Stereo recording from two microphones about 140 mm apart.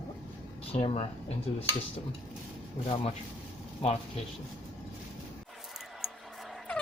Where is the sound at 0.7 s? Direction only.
50° left (ahead or behind).